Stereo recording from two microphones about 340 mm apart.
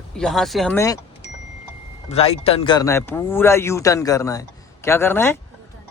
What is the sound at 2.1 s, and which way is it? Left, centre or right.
Speech, centre.